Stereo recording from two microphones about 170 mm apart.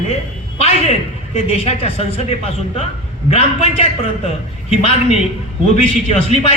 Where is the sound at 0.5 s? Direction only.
35° left (ahead or behind).